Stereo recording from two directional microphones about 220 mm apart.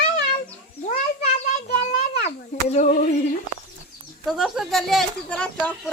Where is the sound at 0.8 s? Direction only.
30° left (ahead or behind).